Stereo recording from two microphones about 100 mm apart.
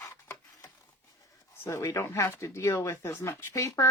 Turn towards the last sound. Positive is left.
turn(degrees=30)  # may be behind; listen again after turning